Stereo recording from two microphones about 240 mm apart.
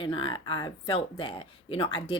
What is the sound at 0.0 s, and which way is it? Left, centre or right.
Speech, left.